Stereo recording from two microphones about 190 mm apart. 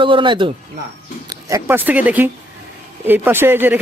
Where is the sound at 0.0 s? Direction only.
25° right (ahead or behind).